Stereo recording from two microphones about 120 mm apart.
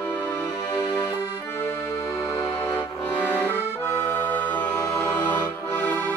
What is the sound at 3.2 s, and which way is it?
Accordion, 15° left (ahead or behind).